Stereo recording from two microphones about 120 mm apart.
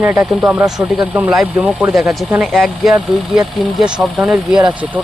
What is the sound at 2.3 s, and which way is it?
Speech, 10° right (ahead or behind).